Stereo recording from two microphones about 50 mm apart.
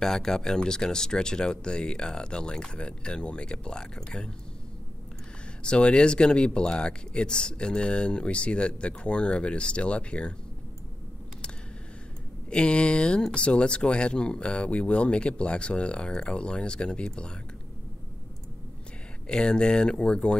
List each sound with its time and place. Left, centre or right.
0.0 s speech: centre
5.6 s speech: left
12.4 s speech: centre
19.2 s speech: centre